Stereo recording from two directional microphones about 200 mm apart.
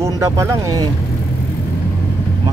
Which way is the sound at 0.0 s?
15° right (ahead or behind).